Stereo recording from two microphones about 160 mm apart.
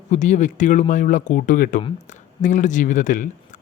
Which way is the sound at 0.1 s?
50° left (ahead or behind).